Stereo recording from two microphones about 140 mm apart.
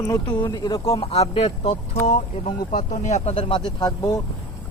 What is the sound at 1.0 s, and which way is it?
Speech, 45° left (ahead or behind).